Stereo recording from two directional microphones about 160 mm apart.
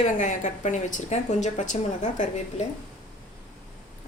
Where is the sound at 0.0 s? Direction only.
50° left (ahead or behind).